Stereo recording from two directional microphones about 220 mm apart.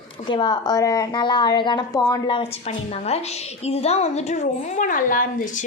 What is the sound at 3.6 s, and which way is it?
A woman's voice, 30° left (ahead or behind).